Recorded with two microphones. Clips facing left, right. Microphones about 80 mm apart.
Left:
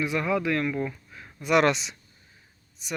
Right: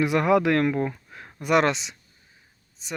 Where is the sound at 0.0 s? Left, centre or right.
Right.